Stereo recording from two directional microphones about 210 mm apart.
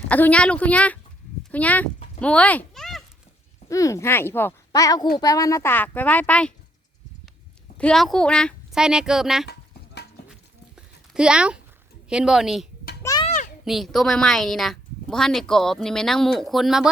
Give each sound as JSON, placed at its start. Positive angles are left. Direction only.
{"t": 0.1, "sound": "speech", "side_deg": 5}
{"t": 3.7, "sound": "speech", "side_deg": 15}
{"t": 7.8, "sound": "speech", "side_deg": 5}
{"t": 9.5, "sound": "a sound", "side_deg": 50}
{"t": 10.8, "sound": "a sound", "side_deg": -5}
{"t": 12.0, "sound": "speech", "side_deg": -5}
{"t": 13.0, "sound": "children playing", "side_deg": 15}
{"t": 13.2, "sound": "a sound", "side_deg": 35}
{"t": 13.7, "sound": "speech", "side_deg": 0}